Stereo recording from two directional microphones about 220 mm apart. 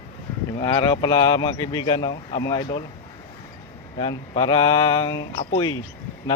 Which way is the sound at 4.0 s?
25° left (ahead or behind).